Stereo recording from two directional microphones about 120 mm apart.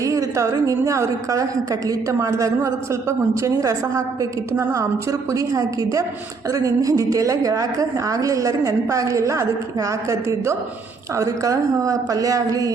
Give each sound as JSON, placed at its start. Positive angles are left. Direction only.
{"t": 0.0, "sound": "a woman's voice", "side_deg": -25}